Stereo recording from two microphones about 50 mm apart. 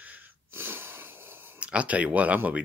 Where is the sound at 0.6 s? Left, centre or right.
Right.